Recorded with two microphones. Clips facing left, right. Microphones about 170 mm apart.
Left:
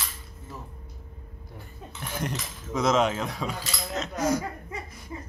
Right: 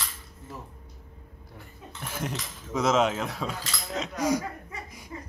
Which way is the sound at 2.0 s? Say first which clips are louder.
Left 1 dB; 5° right (ahead or behind).